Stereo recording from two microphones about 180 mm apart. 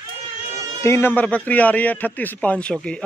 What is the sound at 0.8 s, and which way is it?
Speech, 15° left (ahead or behind).